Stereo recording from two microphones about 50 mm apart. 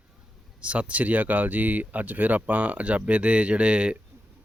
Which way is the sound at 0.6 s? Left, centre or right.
Right.